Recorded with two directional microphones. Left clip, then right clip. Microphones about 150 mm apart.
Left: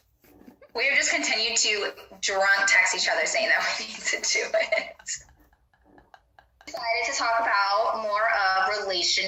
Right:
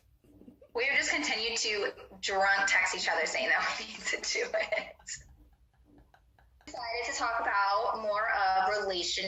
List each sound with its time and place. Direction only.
0.7 s a woman's voice: 30° left (ahead or behind)
6.7 s a woman's voice: 30° left (ahead or behind)